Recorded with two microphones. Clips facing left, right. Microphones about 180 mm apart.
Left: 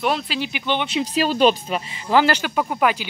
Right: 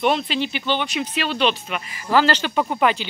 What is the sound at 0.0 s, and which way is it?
Speech, centre (ahead or behind).